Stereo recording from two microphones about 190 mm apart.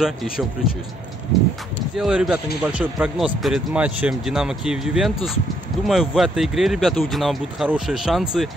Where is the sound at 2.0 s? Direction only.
Centre (ahead or behind).